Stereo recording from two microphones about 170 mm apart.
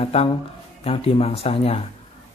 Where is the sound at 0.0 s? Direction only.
35° left (ahead or behind).